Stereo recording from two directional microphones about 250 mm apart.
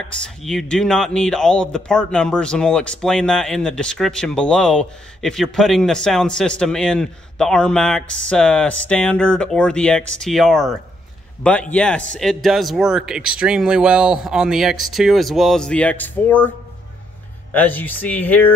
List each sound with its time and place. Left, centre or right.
0.4 s speech: centre